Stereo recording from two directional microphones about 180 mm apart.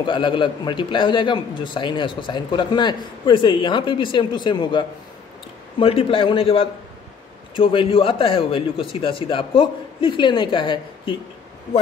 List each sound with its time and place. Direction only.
0.0 s a man's voice: 25° left (ahead or behind)